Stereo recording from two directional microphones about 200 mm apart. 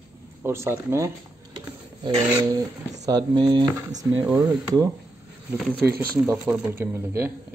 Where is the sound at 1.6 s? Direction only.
20° right (ahead or behind).